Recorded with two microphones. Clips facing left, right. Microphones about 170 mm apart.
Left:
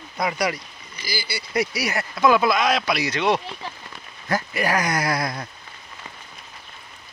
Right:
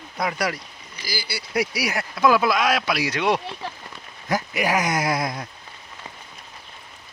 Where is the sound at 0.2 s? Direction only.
Centre (ahead or behind); by 5.4 s 20° right (ahead or behind).